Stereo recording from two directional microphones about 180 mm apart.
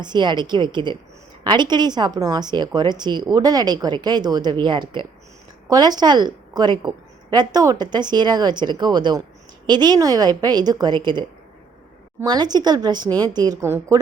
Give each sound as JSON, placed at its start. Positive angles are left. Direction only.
{"t": 0.0, "sound": "a woman's voice", "side_deg": -25}